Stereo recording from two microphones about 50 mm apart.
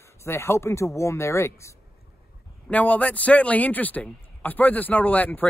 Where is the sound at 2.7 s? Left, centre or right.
Left.